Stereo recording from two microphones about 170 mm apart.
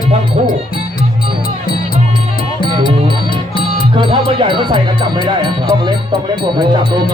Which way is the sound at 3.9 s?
30° right (ahead or behind).